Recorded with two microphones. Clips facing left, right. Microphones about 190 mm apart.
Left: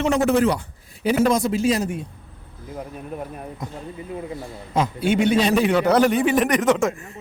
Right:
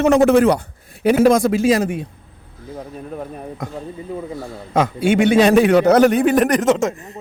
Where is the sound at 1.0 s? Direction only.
60° right (ahead or behind); by 2.0 s 90° right.